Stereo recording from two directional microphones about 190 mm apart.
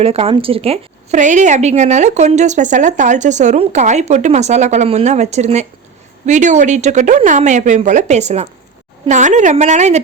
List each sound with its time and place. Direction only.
0.0 s a woman's voice: 30° right (ahead or behind)